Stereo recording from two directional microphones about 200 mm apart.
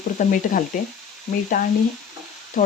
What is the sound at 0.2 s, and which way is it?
Speech, 40° left (ahead or behind).